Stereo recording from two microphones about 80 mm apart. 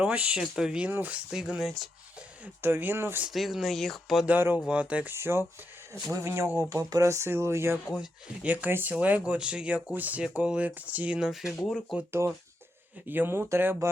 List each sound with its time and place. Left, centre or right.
0.0 s speech: centre
1.3 s speech: centre
2.6 s speech: right
3.2 s speech: centre
4.3 s speech: right
5.1 s speech: right
8.4 s speech: right
11.2 s speech: centre
11.6 s speech: centre
12.2 s speech: right